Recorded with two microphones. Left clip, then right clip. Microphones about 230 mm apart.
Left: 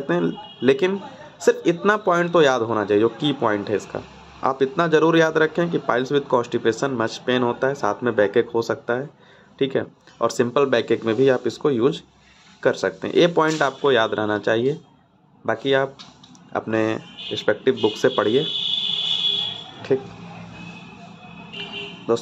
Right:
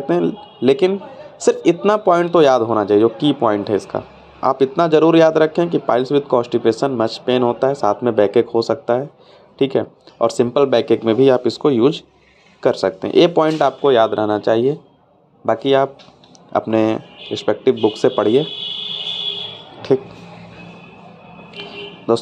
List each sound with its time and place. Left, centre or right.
0.0 s a man's voice: centre
19.9 s speech: centre
22.1 s a man's voice: centre